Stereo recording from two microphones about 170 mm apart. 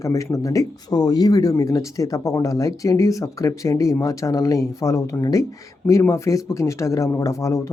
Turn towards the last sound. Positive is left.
turn(degrees=20)  # may be behind; listen again after turning